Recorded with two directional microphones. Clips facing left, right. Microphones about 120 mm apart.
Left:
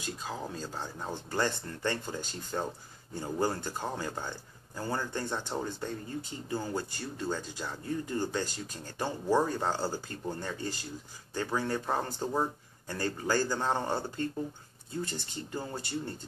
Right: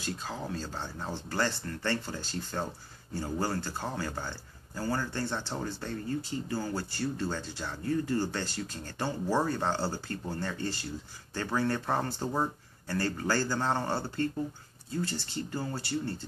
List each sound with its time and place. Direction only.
0.0 s speech: 15° left (ahead or behind)